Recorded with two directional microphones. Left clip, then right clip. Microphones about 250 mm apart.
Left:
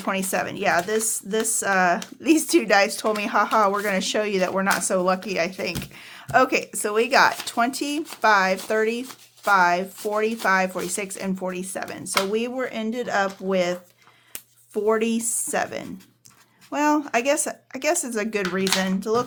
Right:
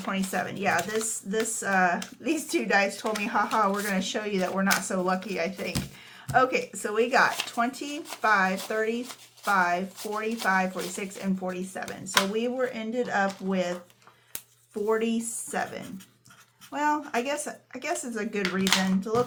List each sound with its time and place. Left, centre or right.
0.0 s speech: left
14.8 s speech: left